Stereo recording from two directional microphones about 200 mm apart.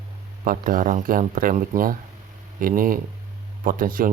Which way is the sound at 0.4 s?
45° right (ahead or behind).